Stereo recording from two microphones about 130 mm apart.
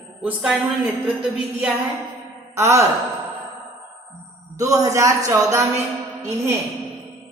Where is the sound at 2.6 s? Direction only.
20° right (ahead or behind).